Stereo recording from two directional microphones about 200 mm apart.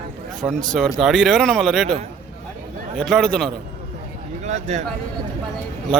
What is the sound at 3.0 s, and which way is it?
Speech, centre (ahead or behind).